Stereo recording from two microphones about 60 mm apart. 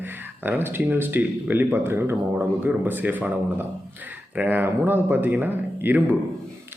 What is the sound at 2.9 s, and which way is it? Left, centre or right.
A man's voice, right.